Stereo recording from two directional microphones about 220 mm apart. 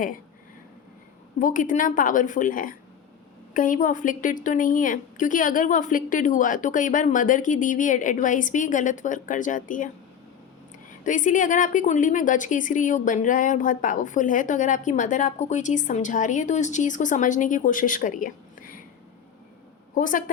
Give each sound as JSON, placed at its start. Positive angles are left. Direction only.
{"t": 1.4, "sound": "a woman's voice", "side_deg": 35}
{"t": 11.0, "sound": "a woman's voice", "side_deg": 35}
{"t": 19.9, "sound": "a woman's voice", "side_deg": 35}